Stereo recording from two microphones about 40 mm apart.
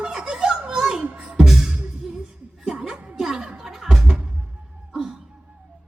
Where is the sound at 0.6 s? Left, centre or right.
Centre.